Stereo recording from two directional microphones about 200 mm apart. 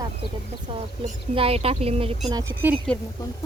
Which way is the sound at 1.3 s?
30° right (ahead or behind).